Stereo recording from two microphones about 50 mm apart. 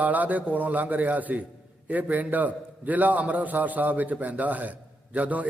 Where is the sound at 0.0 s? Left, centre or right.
Right.